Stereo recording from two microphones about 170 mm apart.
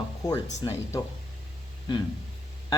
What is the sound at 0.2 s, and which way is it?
Speech, 20° left (ahead or behind).